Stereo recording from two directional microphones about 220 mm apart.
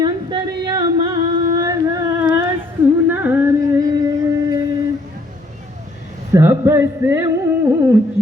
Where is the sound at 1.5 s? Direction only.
15° right (ahead or behind).